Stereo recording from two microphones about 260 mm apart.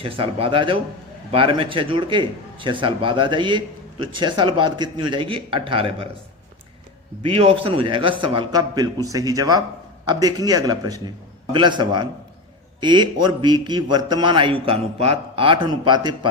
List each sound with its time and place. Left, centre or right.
0.0 s a man's voice: right
7.2 s a man's voice: right